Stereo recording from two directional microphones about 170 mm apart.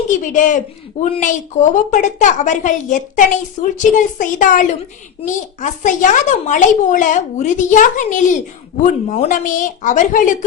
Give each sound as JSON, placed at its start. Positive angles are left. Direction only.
{"t": 0.1, "sound": "a woman's voice", "side_deg": 50}